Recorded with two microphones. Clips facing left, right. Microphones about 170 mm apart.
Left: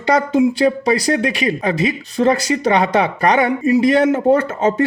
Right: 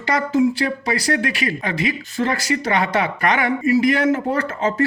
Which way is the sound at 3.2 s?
35° left (ahead or behind).